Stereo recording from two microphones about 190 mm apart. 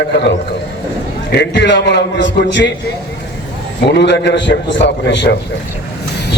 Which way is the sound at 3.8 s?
65° left (ahead or behind).